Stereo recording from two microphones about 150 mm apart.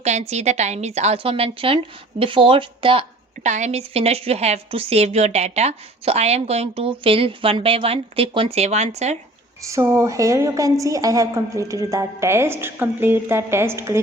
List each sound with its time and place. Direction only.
0.0 s a woman's voice: 50° right (ahead or behind)
3.4 s speech: 50° right (ahead or behind)
9.6 s a woman's voice: 20° right (ahead or behind)